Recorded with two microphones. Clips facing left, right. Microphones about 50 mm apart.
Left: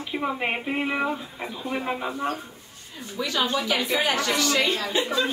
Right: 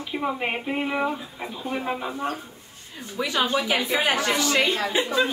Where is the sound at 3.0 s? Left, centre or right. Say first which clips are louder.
Right 1 dB; right.